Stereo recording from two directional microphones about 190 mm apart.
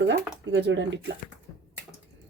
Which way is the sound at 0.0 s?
65° right (ahead or behind).